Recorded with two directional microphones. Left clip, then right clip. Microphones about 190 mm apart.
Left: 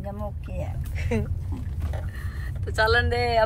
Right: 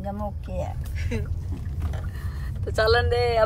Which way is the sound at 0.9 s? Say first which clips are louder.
Left 6 dB; 25° left (ahead or behind).